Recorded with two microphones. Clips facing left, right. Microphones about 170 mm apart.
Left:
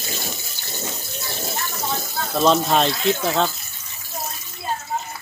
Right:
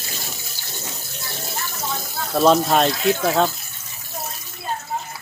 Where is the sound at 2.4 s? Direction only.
5° right (ahead or behind).